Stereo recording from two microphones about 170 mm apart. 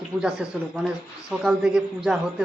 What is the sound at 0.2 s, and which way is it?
A man's voice, 5° right (ahead or behind).